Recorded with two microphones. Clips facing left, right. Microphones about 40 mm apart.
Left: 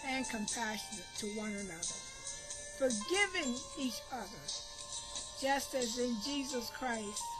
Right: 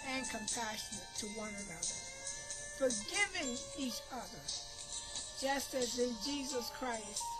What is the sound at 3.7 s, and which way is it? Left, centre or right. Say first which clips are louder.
Speech: left 2 dB; centre.